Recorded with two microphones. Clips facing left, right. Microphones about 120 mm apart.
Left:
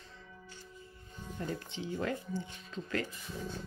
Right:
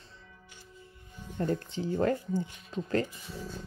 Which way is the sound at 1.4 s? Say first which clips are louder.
Right 8 dB; 45° right (ahead or behind).